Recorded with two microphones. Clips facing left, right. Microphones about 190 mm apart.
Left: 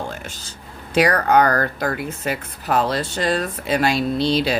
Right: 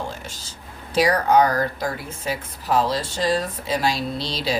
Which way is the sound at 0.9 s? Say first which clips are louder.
Left 1 dB; 60° left (ahead or behind).